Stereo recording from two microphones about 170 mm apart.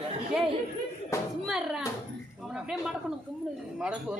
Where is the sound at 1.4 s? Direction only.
5° right (ahead or behind).